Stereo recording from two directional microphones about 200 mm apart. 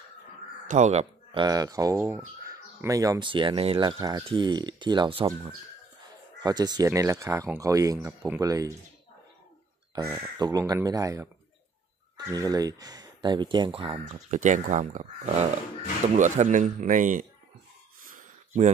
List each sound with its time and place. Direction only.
0.7 s speech: 35° right (ahead or behind)
1.4 s speech: 20° right (ahead or behind)
6.4 s speech: 20° right (ahead or behind)
9.9 s speech: 20° right (ahead or behind)
12.3 s speech: 20° right (ahead or behind)
14.3 s a man's voice: 40° right (ahead or behind)
16.2 s a man's voice: 40° right (ahead or behind)
18.0 s a sound: 40° right (ahead or behind)